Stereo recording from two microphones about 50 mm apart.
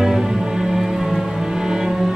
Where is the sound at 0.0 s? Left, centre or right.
Centre.